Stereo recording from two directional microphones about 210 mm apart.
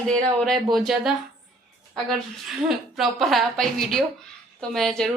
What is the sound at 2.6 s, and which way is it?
A woman's voice, centre (ahead or behind).